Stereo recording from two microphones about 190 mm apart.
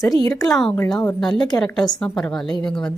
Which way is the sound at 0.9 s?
5° left (ahead or behind).